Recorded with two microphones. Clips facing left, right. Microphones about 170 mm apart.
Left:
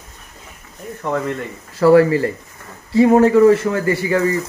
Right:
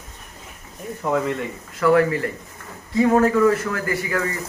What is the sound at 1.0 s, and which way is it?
Speech, 5° right (ahead or behind).